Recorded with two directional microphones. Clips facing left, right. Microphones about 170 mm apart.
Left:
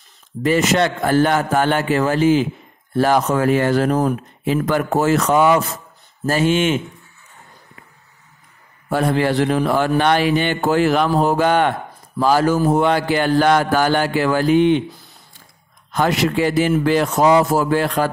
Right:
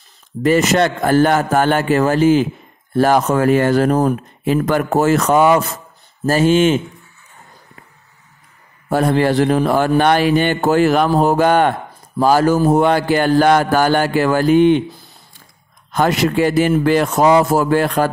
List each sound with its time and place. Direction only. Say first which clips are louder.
0.4 s a man's voice: right 3 dB; 45° right (ahead or behind)
8.8 s a man's voice: right 3 dB; 40° right (ahead or behind)
15.9 s a man's voice: right 2 dB; 45° right (ahead or behind)